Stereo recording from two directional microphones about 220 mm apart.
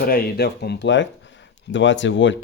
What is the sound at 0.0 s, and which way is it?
Speech, 40° left (ahead or behind).